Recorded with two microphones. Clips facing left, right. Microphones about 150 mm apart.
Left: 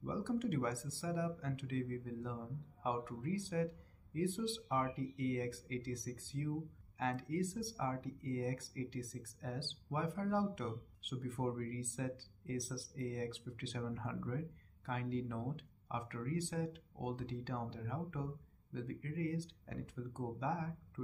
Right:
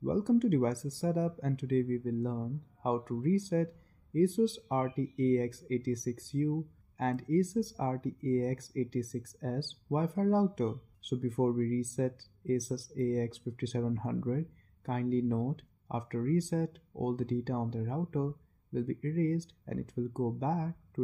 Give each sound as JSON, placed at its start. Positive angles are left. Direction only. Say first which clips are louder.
{"t": 0.0, "sound": "speech", "louder": "right 11 dB", "side_deg": -40}